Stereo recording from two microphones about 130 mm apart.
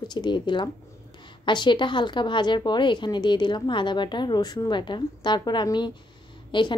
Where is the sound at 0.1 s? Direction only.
35° left (ahead or behind).